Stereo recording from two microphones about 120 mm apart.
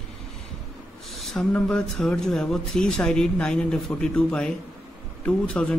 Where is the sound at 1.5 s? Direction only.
5° left (ahead or behind).